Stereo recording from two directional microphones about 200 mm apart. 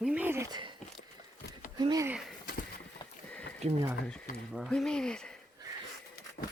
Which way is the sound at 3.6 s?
35° right (ahead or behind).